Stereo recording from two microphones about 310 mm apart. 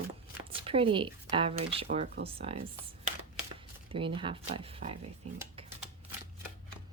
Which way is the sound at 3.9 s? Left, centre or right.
Centre.